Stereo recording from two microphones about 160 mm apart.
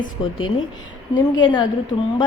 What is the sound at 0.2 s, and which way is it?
A woman's voice, 30° left (ahead or behind).